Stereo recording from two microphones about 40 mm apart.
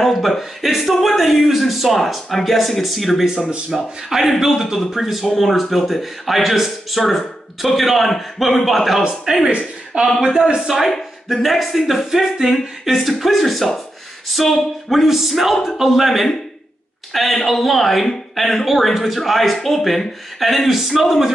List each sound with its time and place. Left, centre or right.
0.1 s speech: centre
3.3 s speech: centre
4.1 s speech: centre
9.0 s speech: centre
11.3 s speech: centre